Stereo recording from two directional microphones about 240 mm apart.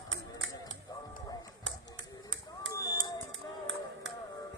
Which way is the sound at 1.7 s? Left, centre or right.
Right.